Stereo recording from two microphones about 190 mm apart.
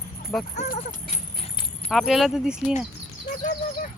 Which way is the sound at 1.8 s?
Centre (ahead or behind).